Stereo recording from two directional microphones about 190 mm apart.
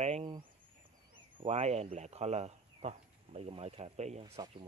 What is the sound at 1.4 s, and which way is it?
Speech, 35° right (ahead or behind).